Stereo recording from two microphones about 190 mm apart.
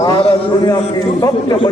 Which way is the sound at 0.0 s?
25° left (ahead or behind).